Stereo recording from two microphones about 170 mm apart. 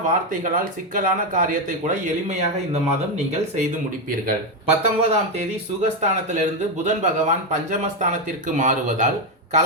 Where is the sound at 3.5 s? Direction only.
50° right (ahead or behind).